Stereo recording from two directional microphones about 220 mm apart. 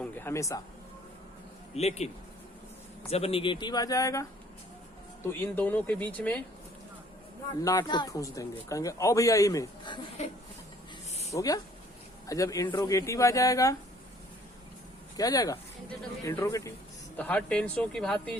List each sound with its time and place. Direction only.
0.0 s speech: 10° left (ahead or behind)
1.7 s speech: 30° left (ahead or behind)
3.1 s speech: 25° left (ahead or behind)
5.3 s speech: 10° left (ahead or behind)
7.6 s speech: 15° left (ahead or behind)
11.1 s a sound: 30° left (ahead or behind)
11.3 s speech: 15° left (ahead or behind)
15.1 s speech: 15° left (ahead or behind)